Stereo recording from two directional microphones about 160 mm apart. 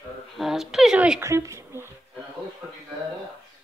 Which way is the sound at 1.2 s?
15° right (ahead or behind).